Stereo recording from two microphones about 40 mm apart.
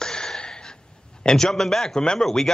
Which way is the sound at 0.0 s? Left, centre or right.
Centre.